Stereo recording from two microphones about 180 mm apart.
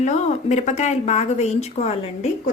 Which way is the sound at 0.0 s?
40° left (ahead or behind).